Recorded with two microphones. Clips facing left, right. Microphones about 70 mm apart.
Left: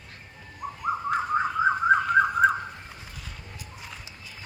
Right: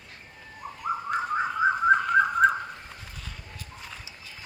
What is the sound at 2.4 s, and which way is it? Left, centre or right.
Car alarm, centre.